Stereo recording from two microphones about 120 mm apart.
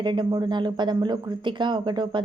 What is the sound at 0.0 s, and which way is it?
A woman's voice, 40° right (ahead or behind).